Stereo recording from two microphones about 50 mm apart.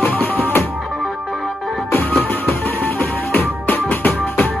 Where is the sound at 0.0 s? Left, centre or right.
Left.